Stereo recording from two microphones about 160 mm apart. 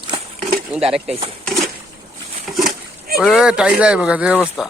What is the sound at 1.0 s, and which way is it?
Speech, 35° right (ahead or behind).